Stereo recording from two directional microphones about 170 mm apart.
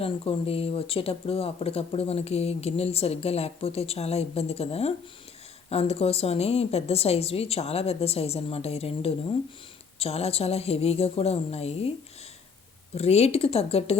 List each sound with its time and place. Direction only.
0.0 s speech: 35° left (ahead or behind)